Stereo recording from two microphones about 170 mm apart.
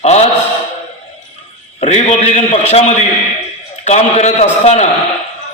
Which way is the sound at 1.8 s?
40° left (ahead or behind).